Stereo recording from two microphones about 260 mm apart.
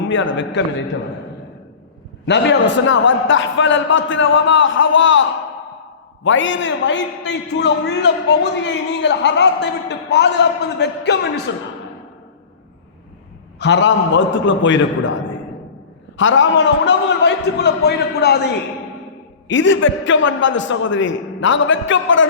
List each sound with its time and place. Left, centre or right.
0.6 s a man's voice: left
2.2 s a man's voice: left
6.2 s a man's voice: left
13.6 s a man's voice: left
19.5 s a man's voice: left